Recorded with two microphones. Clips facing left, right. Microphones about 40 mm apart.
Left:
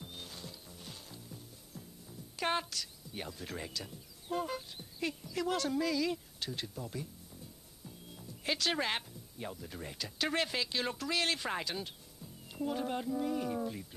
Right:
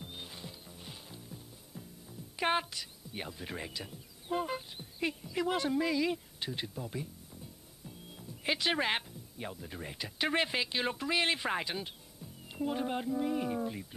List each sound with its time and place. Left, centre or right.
0.0 s mechanisms: centre
7.8 s speech: centre